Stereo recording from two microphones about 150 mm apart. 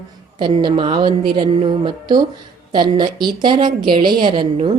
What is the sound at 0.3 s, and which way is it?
A woman's voice, 30° right (ahead or behind).